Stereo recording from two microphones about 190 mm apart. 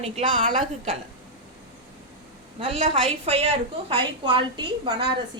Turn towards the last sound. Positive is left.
turn(degrees=-25)  # may be behind; listen again after turning